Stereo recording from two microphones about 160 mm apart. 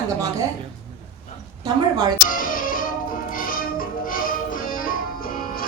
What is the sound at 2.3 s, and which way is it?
Music, 60° left (ahead or behind).